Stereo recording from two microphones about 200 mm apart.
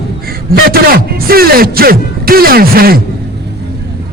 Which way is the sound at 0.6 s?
50° right (ahead or behind).